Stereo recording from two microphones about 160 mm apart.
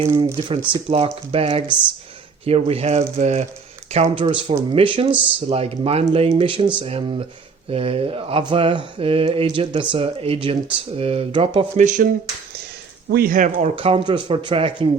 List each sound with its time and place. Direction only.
0.0 s mantra: 35° right (ahead or behind)
3.2 s speech: 45° right (ahead or behind)
3.9 s mantra: 35° right (ahead or behind)
11.8 s speech: 55° right (ahead or behind)
13.1 s speech: 70° right (ahead or behind); by 13.7 s 55° right (ahead or behind)
13.7 s mantra: 35° right (ahead or behind)